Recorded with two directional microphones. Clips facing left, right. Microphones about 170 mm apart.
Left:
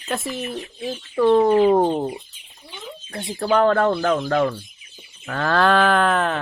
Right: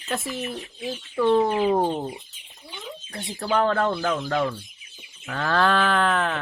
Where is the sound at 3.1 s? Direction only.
55° left (ahead or behind).